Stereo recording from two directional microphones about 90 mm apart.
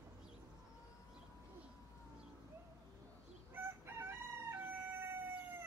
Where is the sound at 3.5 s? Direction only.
25° right (ahead or behind).